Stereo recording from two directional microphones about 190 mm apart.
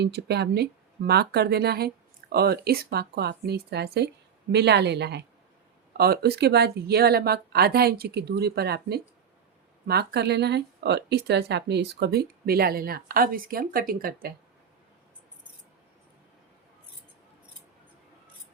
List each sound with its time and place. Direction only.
0.0 s speech: 60° right (ahead or behind)